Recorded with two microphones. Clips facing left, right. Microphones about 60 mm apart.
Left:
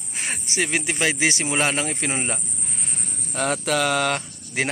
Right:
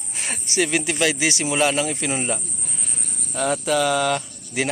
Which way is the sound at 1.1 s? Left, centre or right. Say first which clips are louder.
Right 1 dB; left.